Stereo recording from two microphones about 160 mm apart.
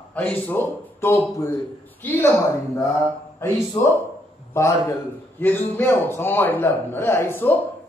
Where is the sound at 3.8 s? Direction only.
15° left (ahead or behind).